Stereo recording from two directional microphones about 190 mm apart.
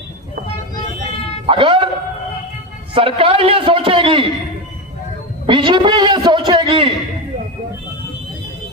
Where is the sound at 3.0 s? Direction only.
30° right (ahead or behind).